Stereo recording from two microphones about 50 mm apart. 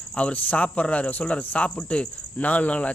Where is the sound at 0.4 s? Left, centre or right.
Left.